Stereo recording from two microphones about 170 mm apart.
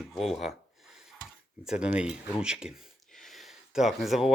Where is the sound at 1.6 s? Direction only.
5° right (ahead or behind).